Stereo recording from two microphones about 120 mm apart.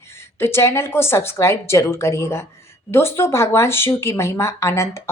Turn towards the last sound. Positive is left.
turn(degrees=25)  # may be behind; listen again after turning